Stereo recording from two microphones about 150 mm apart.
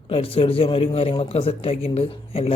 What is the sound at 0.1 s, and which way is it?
A man's voice, 40° left (ahead or behind).